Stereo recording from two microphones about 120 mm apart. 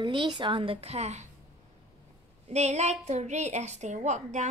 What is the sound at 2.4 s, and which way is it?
A woman's voice, 65° right (ahead or behind).